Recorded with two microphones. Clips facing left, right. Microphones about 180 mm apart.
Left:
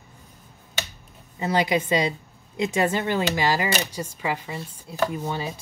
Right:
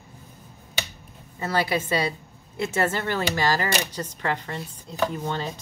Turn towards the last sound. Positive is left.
turn(degrees=10)  # may be behind; listen again after turning